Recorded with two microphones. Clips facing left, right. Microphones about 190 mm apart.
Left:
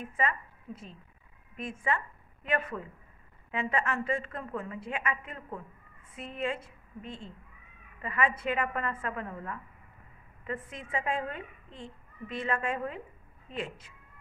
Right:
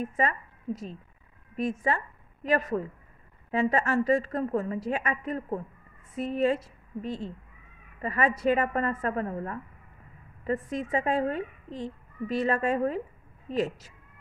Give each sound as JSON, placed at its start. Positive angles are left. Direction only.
{"t": 0.0, "sound": "a woman's voice", "side_deg": -40}